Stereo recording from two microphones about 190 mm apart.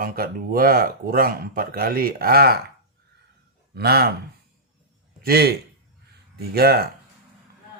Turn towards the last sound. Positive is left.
turn(degrees=-55)  # may be behind; listen again after turning